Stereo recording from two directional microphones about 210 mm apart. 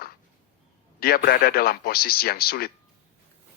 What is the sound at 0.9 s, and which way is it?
A man's voice, 45° left (ahead or behind).